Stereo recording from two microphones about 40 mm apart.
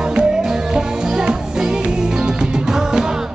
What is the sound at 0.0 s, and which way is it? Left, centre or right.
Music, right.